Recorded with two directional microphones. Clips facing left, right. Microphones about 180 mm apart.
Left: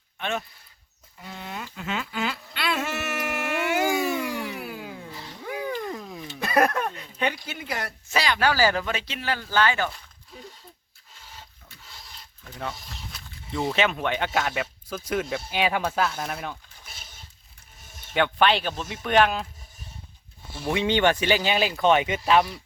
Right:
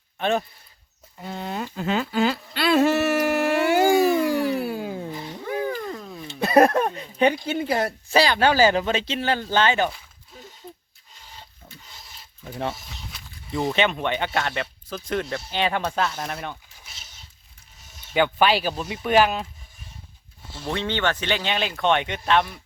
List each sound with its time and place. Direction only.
0.2 s speech: 35° right (ahead or behind)
1.2 s humming: 35° right (ahead or behind)
6.0 s a sound: 10° left (ahead or behind)
6.2 s speech: 30° right (ahead or behind)
11.8 s filing: centre (ahead or behind)
12.7 s speech: centre (ahead or behind)
16.8 s a sound: 55° left (ahead or behind)
18.1 s speech: 5° right (ahead or behind)
20.6 s speech: 10° left (ahead or behind)